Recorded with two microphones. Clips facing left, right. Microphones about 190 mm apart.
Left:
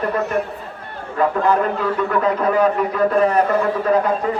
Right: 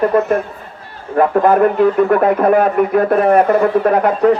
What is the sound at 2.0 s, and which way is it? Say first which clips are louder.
A man's voice: right 6 dB; 55° right (ahead or behind).